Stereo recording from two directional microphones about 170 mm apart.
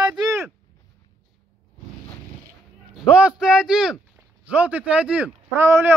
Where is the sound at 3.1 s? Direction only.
5° right (ahead or behind).